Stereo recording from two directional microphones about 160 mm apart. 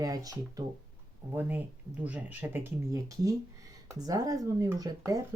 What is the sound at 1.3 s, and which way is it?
Speech, 10° right (ahead or behind).